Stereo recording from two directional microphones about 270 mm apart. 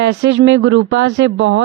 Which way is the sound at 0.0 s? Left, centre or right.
Right.